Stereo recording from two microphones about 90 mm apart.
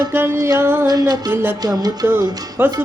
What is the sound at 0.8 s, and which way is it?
Music, 45° right (ahead or behind).